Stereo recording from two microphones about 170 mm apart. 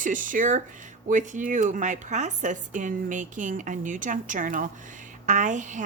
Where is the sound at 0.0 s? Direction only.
50° right (ahead or behind).